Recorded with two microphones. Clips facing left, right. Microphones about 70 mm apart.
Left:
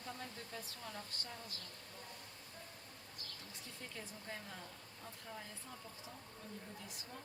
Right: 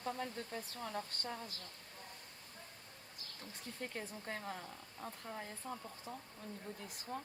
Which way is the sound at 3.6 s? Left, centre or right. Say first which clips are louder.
Right 7 dB; right.